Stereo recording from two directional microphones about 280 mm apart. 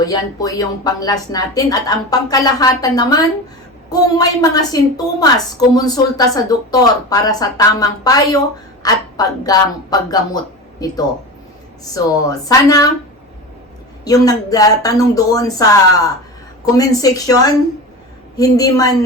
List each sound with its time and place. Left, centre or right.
0.0 s a woman's voice: centre
14.0 s a woman's voice: centre
18.5 s a woman's voice: centre